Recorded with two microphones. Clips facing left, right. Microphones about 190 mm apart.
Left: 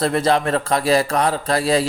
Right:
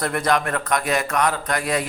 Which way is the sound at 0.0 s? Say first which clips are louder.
Left 4 dB; 25° left (ahead or behind).